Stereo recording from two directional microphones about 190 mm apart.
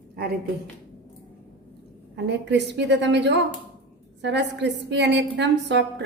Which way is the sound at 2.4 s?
65° right (ahead or behind).